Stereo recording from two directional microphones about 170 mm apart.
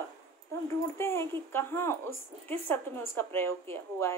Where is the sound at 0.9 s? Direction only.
15° left (ahead or behind).